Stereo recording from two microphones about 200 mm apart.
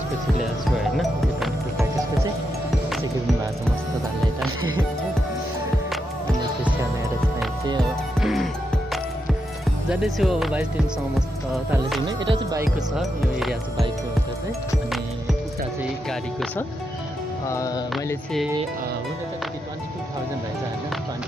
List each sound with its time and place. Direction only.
8.2 s music: centre (ahead or behind)
9.8 s music: 5° right (ahead or behind)
12.3 s speech: 20° right (ahead or behind)
12.9 s music: centre (ahead or behind)
17.5 s music: 15° left (ahead or behind)